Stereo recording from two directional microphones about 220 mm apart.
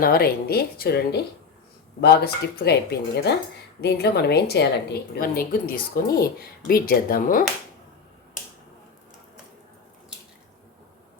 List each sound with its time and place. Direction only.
0.0 s a woman's voice: 45° left (ahead or behind)